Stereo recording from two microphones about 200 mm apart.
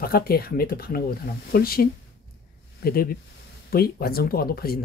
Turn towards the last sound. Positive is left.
turn(degrees=50)  # may be behind; listen again after turning